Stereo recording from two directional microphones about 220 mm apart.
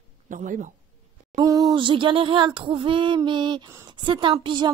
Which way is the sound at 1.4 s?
15° right (ahead or behind).